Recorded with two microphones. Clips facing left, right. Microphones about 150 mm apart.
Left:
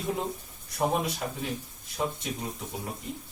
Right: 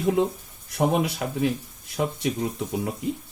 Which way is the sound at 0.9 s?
65° right (ahead or behind).